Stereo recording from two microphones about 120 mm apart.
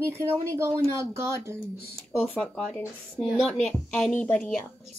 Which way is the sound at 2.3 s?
Centre (ahead or behind).